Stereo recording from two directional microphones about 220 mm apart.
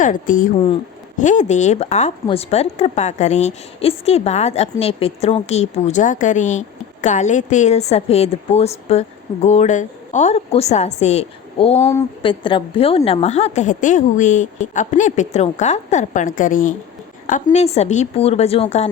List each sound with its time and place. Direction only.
0.0 s speech: 35° left (ahead or behind)
11.9 s speech: 20° left (ahead or behind)